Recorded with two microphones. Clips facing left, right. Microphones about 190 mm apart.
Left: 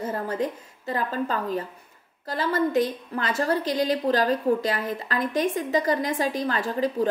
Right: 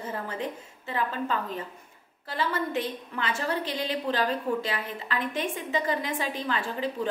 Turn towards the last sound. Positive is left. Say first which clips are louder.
# left 6 dB
turn(degrees=40)  # may be behind; listen again after turning